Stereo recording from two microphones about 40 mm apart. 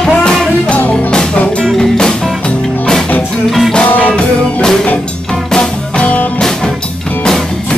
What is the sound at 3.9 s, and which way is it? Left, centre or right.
Music, left.